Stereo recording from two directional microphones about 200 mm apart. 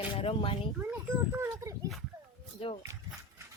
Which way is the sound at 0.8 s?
10° right (ahead or behind).